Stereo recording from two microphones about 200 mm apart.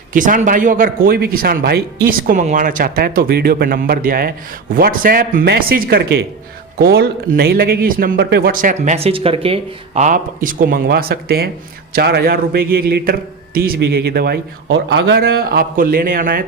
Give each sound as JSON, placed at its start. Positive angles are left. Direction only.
{"t": 0.1, "sound": "a man's voice", "side_deg": -40}